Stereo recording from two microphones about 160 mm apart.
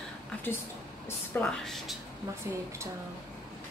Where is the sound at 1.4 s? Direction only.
5° left (ahead or behind).